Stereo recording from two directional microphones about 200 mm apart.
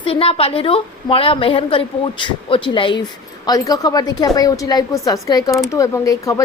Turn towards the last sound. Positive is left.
turn(degrees=15)  # may be behind; listen again after turning